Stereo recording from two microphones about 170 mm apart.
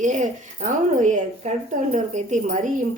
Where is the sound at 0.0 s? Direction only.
45° right (ahead or behind).